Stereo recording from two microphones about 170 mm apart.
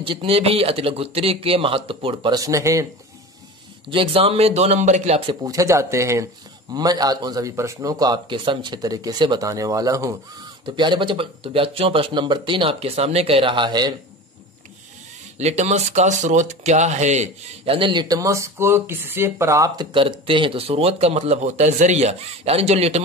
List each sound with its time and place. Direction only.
0.0 s speech: 30° right (ahead or behind)
3.9 s speech: 30° right (ahead or behind)
5.4 s speech: 20° right (ahead or behind)
15.3 s speech: 40° right (ahead or behind)